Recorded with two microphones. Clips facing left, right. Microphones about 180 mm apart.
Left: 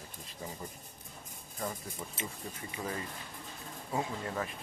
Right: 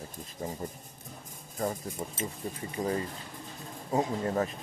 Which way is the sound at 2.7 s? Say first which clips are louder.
Right 8 dB; 35° right (ahead or behind).